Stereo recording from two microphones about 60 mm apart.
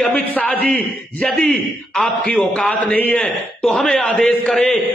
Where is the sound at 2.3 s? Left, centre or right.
Left.